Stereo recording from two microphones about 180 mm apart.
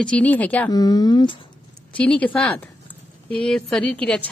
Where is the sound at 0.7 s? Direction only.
20° left (ahead or behind).